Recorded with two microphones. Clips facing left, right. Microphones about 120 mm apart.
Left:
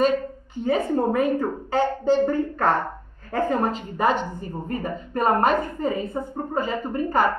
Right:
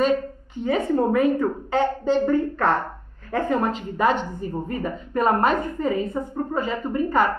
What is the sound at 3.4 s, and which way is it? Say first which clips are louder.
A woman's voice: even; 35° left (ahead or behind).